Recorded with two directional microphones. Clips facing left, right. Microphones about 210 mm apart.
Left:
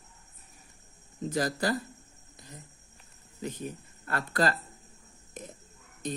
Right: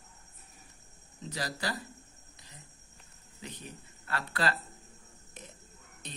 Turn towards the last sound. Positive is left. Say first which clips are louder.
# left 13 dB
turn(degrees=45)  # may be behind; listen again after turning